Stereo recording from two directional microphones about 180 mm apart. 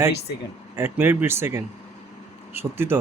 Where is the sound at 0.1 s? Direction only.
65° left (ahead or behind).